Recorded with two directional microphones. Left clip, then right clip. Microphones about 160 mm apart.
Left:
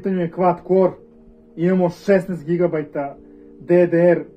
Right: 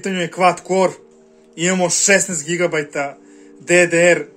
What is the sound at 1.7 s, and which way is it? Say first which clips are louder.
Speech: right 2 dB; 30° right (ahead or behind).